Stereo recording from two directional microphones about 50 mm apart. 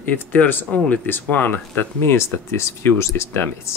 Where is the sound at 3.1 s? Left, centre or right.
Left.